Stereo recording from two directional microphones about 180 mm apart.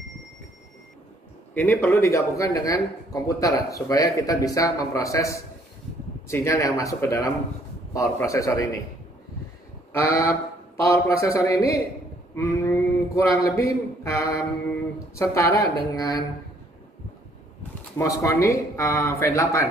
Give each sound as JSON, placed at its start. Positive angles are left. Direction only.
{"t": 1.5, "sound": "a man's voice", "side_deg": 10}
{"t": 9.9, "sound": "a man's voice", "side_deg": 15}
{"t": 17.9, "sound": "speech", "side_deg": 15}